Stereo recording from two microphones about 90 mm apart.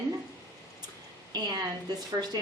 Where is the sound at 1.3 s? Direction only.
50° right (ahead or behind).